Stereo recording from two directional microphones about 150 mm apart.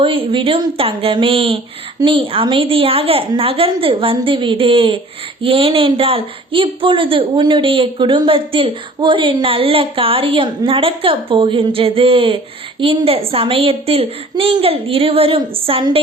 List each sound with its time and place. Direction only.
0.0 s speech: 35° right (ahead or behind)